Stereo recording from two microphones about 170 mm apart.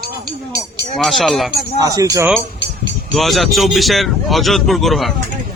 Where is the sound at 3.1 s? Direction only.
Centre (ahead or behind).